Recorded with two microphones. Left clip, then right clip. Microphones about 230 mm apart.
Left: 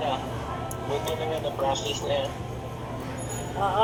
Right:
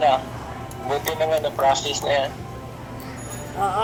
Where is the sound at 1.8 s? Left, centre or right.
Right.